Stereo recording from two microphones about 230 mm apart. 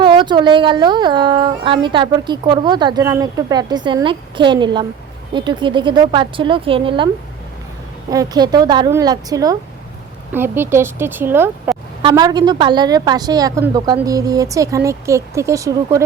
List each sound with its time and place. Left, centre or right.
0.0 s speech: right
8.1 s a woman's voice: centre